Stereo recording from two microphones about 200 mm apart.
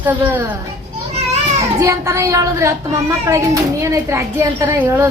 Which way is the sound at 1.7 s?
15° right (ahead or behind).